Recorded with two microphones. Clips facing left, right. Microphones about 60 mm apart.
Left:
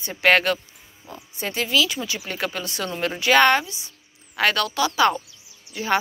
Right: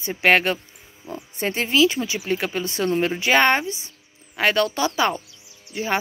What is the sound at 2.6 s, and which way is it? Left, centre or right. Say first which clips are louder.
Speech: right 5 dB; right.